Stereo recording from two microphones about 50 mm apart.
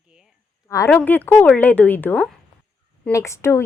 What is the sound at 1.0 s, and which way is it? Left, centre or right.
A woman's voice, left.